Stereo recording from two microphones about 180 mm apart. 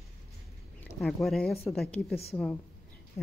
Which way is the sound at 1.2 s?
5° left (ahead or behind).